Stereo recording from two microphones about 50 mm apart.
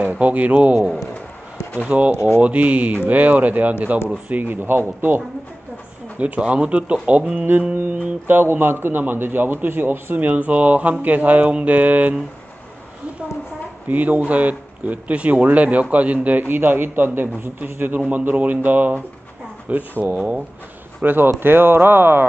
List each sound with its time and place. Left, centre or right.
0.1 s speech: right
1.9 s speech: right
2.1 s speech: left
2.4 s speech: right
4.5 s speech: right
6.1 s speech: right
7.7 s speech: right
13.8 s speech: right
16.4 s speech: right
17.9 s speech: right
21.0 s speech: right